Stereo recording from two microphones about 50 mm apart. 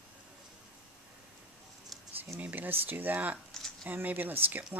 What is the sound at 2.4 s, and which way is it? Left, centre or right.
Speech, right.